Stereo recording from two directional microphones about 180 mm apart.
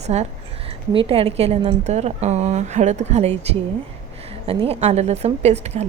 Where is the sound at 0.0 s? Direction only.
40° right (ahead or behind).